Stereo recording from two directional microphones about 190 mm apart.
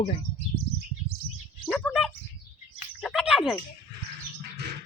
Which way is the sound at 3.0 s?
Centre (ahead or behind).